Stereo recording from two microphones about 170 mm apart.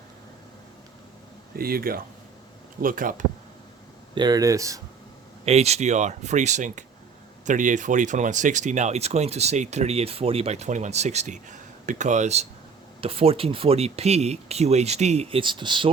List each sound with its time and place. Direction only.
1.5 s speech: 60° right (ahead or behind)
4.1 s speech: 25° right (ahead or behind)
5.5 s speech: 40° right (ahead or behind)